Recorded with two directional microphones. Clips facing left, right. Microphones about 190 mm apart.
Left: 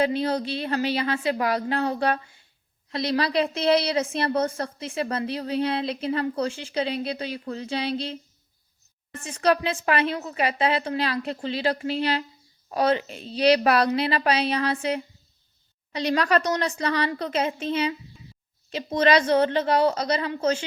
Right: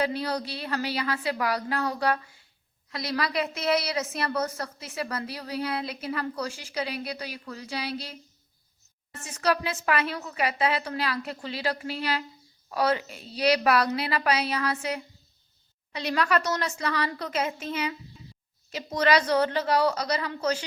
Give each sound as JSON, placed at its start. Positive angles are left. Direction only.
{"t": 0.0, "sound": "a woman's voice", "side_deg": 25}
{"t": 9.2, "sound": "a woman's voice", "side_deg": 30}